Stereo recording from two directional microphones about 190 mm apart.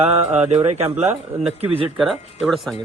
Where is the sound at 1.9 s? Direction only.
Centre (ahead or behind).